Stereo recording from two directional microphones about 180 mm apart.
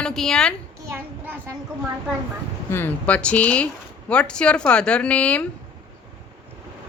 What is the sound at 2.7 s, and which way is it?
A woman's voice, 10° left (ahead or behind).